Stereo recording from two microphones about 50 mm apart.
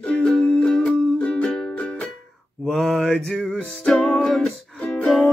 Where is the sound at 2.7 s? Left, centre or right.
Centre.